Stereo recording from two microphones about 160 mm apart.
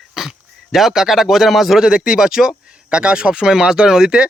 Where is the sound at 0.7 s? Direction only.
Centre (ahead or behind).